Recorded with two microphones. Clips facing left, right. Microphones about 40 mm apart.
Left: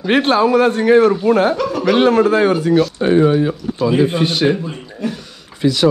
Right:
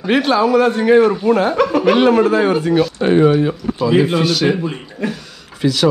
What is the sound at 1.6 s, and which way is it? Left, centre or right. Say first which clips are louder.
Speech: right 4 dB; right.